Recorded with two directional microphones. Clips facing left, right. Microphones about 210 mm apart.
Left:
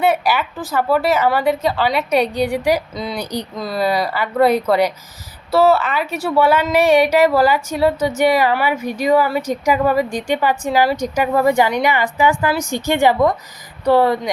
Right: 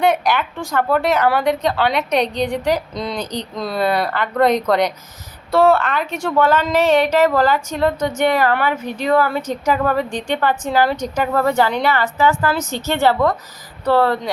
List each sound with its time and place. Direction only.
0.0 s a woman's voice: 5° left (ahead or behind)